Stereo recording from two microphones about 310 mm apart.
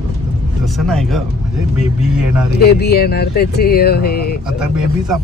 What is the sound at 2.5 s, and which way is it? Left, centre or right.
Speech, left.